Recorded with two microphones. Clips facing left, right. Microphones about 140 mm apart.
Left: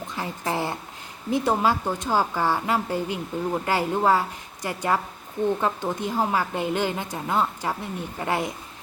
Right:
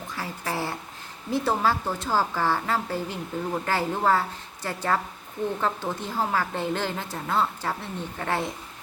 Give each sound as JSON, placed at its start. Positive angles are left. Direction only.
{"t": 0.2, "sound": "a woman's voice", "side_deg": 20}